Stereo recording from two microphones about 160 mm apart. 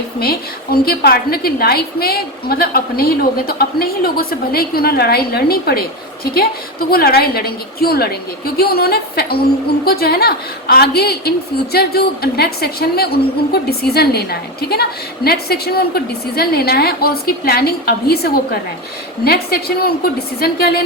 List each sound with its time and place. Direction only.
0.2 s a woman's voice: 70° left (ahead or behind)